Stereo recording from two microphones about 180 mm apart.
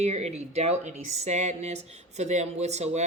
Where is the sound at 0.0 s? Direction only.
40° right (ahead or behind).